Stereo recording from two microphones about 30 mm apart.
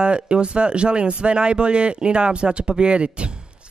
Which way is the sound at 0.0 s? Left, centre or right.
Right.